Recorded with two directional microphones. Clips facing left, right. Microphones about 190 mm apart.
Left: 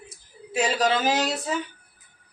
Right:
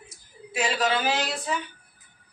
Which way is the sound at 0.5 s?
40° left (ahead or behind).